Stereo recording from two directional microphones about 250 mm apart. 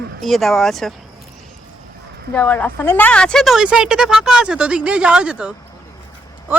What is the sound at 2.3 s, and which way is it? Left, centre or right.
Speech, centre.